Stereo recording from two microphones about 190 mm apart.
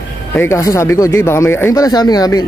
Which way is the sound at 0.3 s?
10° left (ahead or behind).